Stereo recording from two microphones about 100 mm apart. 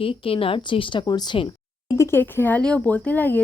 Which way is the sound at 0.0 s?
65° left (ahead or behind).